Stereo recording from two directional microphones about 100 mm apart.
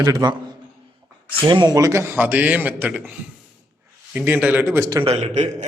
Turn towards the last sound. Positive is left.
turn(degrees=-90)